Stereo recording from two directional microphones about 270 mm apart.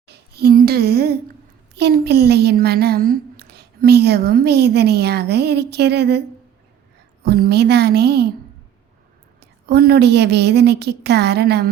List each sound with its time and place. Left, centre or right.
0.1 s a sound: right
1.7 s a woman's voice: right
9.4 s a woman's voice: right